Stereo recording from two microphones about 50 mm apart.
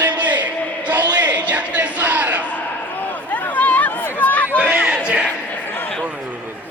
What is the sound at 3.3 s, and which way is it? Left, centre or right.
Chatter, left.